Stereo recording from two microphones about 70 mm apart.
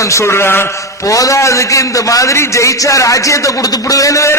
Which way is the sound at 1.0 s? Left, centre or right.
Left.